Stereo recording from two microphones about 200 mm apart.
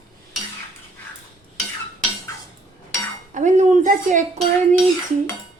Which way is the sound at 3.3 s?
40° right (ahead or behind).